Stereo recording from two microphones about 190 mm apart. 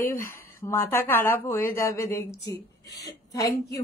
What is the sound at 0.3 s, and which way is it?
A woman's voice, 15° left (ahead or behind).